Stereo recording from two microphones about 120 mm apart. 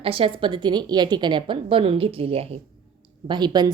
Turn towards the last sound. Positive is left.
turn(degrees=-35)  # may be behind; listen again after turning